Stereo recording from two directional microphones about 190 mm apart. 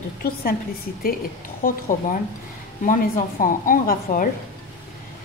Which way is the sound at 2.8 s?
45° left (ahead or behind).